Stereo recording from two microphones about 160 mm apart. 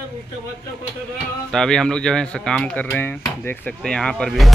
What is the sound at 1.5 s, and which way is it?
Speech, 5° left (ahead or behind).